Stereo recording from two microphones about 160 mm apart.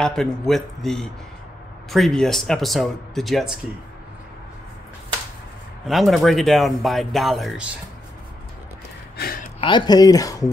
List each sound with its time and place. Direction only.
0.0 s speech: 5° left (ahead or behind)
5.9 s speech: centre (ahead or behind)
9.1 s a sound: 70° left (ahead or behind)
9.6 s speech: 30° left (ahead or behind)